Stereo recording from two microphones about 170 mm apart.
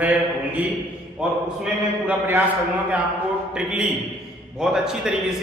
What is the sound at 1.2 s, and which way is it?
A man's voice, 5° right (ahead or behind).